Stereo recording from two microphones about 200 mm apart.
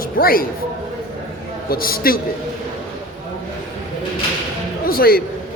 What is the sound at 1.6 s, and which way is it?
Speech, 45° left (ahead or behind).